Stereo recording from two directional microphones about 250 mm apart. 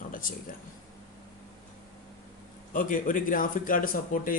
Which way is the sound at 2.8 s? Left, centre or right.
Left.